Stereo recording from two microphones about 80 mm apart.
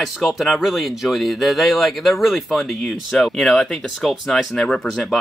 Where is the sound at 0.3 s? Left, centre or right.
Centre.